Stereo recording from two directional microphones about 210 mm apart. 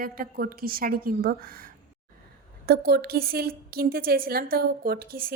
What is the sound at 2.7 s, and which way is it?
A woman's voice, 45° right (ahead or behind).